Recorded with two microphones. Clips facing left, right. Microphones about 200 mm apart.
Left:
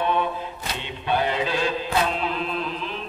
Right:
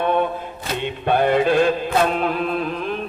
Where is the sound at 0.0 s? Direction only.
50° right (ahead or behind).